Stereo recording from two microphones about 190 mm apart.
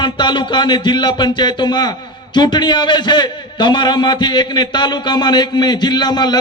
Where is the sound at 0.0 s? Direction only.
25° left (ahead or behind).